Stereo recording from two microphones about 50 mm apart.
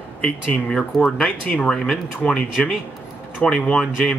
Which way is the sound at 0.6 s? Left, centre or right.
Centre.